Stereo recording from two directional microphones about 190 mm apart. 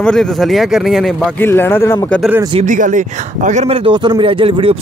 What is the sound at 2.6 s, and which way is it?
Speech, 40° right (ahead or behind).